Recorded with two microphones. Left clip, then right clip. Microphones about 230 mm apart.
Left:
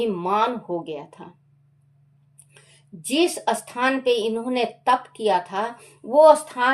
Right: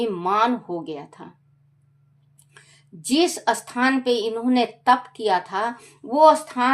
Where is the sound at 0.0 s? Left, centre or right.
Right.